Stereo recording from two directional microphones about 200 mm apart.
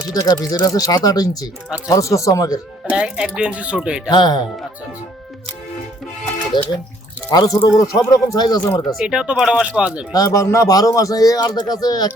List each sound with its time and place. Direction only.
0.1 s speech: 20° left (ahead or behind)
2.9 s speech: 5° right (ahead or behind)
4.1 s speech: 20° left (ahead or behind)
6.5 s speech: 25° left (ahead or behind)
9.0 s speech: 5° right (ahead or behind)
10.1 s speech: 20° left (ahead or behind)